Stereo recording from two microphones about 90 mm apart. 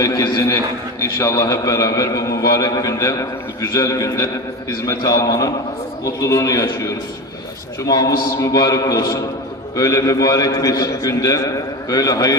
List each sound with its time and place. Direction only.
0.0 s a man's voice: 45° left (ahead or behind)